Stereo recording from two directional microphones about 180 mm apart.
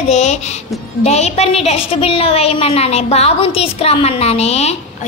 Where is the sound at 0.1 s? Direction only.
40° left (ahead or behind).